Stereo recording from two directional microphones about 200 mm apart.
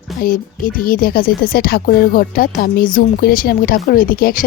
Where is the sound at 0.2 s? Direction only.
45° left (ahead or behind).